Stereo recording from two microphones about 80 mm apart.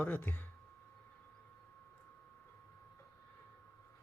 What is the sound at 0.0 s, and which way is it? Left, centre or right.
Speech, left.